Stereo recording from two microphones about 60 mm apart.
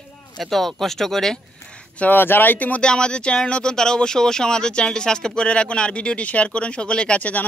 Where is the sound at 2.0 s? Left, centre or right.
Left.